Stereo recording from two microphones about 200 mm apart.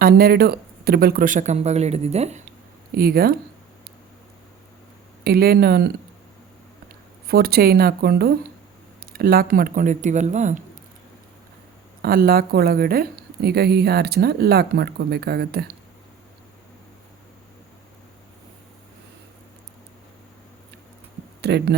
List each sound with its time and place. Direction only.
0.0 s speech: 50° right (ahead or behind); by 2.5 s 35° right (ahead or behind)
2.9 s a woman's voice: 50° right (ahead or behind)
5.2 s a woman's voice: 50° right (ahead or behind)
7.3 s a woman's voice: 50° right (ahead or behind)
12.0 s a woman's voice: 50° right (ahead or behind)
21.4 s speech: 55° right (ahead or behind)